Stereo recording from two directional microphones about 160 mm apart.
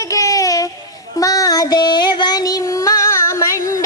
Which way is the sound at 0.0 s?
20° left (ahead or behind).